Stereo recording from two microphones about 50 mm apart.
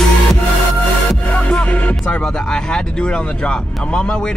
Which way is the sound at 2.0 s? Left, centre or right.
Centre.